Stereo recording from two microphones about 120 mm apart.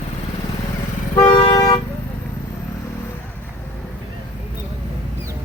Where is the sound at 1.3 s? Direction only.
45° left (ahead or behind).